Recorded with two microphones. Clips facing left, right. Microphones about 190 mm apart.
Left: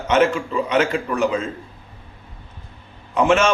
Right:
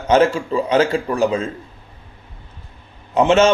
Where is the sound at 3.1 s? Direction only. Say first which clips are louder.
Right 3 dB; 25° right (ahead or behind).